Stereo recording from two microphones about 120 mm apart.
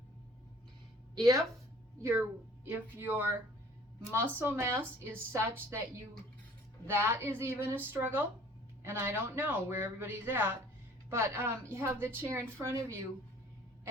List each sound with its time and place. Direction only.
1.1 s a woman's voice: 30° right (ahead or behind)
4.4 s a woman's voice: 20° right (ahead or behind)